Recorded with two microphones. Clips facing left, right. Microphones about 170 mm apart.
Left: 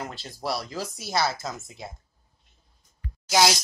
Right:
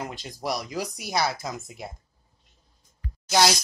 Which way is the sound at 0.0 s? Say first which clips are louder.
Right 1 dB; 15° right (ahead or behind).